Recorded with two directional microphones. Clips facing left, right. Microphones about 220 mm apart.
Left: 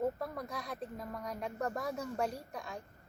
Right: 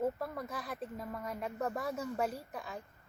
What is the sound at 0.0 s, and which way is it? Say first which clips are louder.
Speech: even; centre (ahead or behind).